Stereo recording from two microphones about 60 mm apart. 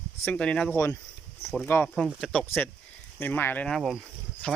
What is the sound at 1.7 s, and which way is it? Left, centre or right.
Speech, left.